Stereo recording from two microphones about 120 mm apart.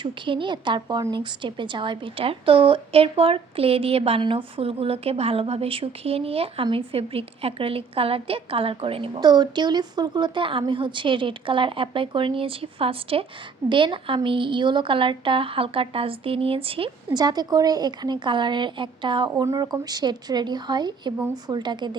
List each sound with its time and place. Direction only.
0.0 s a woman's voice: 40° right (ahead or behind)
9.2 s a woman's voice: 35° right (ahead or behind)
17.2 s a woman's voice: 35° right (ahead or behind)
19.5 s a woman's voice: 30° right (ahead or behind)